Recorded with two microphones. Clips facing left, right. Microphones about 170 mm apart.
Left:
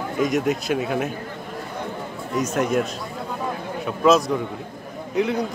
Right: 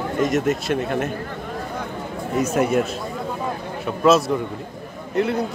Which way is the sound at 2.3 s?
5° right (ahead or behind).